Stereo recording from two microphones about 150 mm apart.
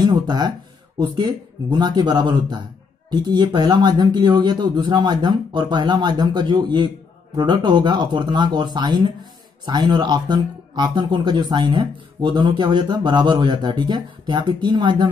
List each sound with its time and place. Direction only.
0.0 s speech: 30° right (ahead or behind)